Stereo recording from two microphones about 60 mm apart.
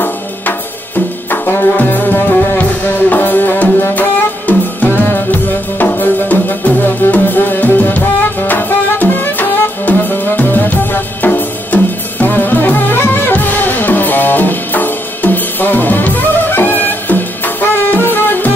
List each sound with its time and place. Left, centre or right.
1.3 s music: left